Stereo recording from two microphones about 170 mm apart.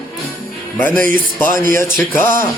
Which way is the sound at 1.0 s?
55° right (ahead or behind).